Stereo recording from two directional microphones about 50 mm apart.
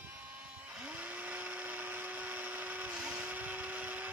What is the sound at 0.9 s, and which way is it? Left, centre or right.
Blender, right.